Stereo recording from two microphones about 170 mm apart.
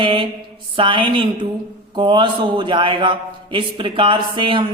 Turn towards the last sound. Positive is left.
turn(degrees=-30)  # may be behind; listen again after turning